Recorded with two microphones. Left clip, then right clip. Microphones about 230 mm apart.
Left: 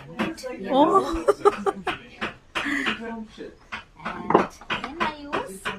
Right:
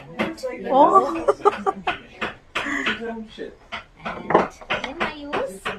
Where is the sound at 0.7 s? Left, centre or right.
Left.